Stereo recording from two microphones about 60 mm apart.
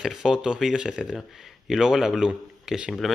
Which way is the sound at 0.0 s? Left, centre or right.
Centre.